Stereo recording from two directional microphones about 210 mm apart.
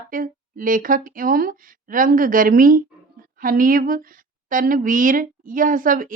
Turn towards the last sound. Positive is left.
turn(degrees=-40)  # may be behind; listen again after turning